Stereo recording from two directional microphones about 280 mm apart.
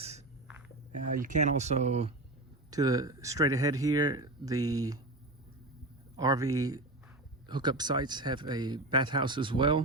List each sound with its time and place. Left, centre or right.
0.9 s speech: right
6.1 s speech: centre